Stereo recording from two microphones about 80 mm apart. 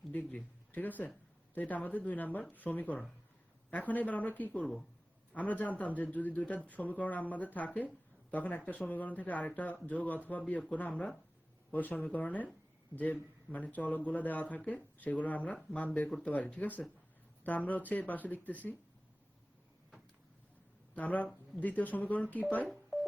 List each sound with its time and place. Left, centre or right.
0.1 s speech: centre
20.9 s speech: centre
22.6 s telephone dialing: centre